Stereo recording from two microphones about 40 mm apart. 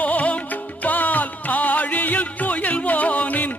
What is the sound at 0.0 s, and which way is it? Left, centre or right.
Music, left.